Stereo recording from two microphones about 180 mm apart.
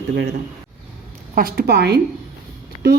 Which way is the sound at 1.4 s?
55° right (ahead or behind).